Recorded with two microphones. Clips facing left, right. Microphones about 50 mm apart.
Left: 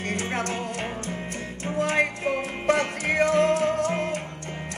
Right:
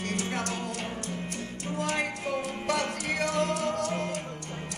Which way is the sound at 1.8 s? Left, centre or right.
Left.